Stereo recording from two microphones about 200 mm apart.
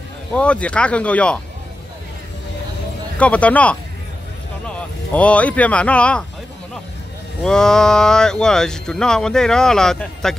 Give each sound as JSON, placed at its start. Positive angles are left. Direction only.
{"t": 0.3, "sound": "speech", "side_deg": 5}
{"t": 3.2, "sound": "speech", "side_deg": 5}
{"t": 5.1, "sound": "speech", "side_deg": 5}
{"t": 7.4, "sound": "speech", "side_deg": 5}